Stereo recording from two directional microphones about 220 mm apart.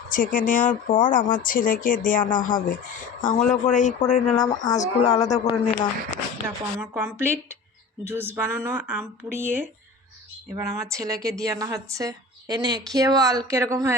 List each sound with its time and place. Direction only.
0.1 s speech: 40° left (ahead or behind)
4.4 s speech: 15° left (ahead or behind)
4.8 s speech: 30° left (ahead or behind)
5.3 s speech: 20° left (ahead or behind)
6.9 s a woman's voice: 10° right (ahead or behind)